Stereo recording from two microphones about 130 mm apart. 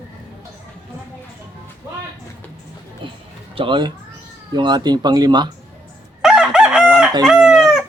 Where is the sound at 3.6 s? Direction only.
40° right (ahead or behind).